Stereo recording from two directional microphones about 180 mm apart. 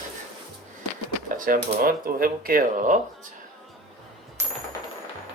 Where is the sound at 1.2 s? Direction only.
50° right (ahead or behind).